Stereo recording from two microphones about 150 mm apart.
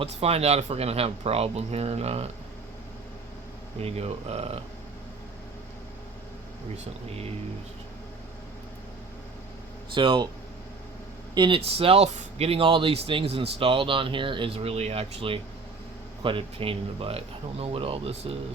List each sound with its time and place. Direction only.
0.0 s speech: 45° right (ahead or behind)
3.8 s speech: 45° right (ahead or behind)
9.9 s speech: 35° right (ahead or behind)
11.3 s speech: 35° right (ahead or behind)